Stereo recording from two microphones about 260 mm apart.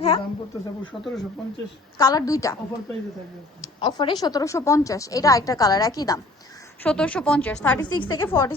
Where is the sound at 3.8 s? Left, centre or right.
Centre.